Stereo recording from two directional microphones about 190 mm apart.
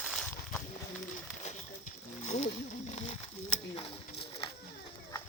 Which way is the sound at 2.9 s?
35° left (ahead or behind).